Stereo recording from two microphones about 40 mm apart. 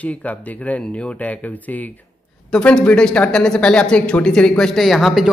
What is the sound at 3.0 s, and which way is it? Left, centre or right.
Speech, left.